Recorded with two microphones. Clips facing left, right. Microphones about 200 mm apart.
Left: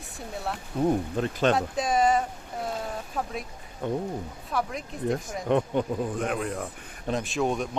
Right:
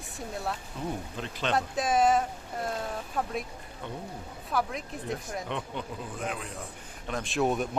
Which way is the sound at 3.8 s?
45° left (ahead or behind).